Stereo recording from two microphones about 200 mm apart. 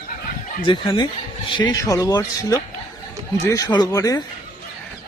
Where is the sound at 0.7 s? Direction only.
20° left (ahead or behind).